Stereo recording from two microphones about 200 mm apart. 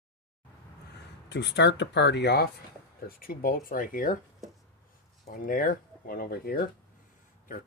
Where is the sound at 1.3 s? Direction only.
60° left (ahead or behind); by 4.2 s 45° left (ahead or behind).